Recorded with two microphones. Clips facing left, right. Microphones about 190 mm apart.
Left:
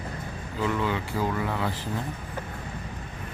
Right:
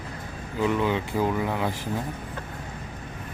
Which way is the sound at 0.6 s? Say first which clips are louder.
Right 3 dB; 20° right (ahead or behind).